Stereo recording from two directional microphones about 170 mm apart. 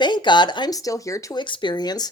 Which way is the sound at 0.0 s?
25° left (ahead or behind).